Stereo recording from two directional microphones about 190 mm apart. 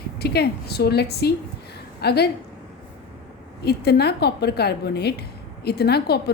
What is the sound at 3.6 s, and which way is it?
A woman's voice, 60° left (ahead or behind).